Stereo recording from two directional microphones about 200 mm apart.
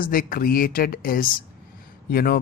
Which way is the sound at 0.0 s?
45° left (ahead or behind).